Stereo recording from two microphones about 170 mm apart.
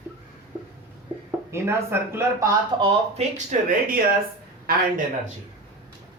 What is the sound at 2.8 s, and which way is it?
Speech, 40° right (ahead or behind).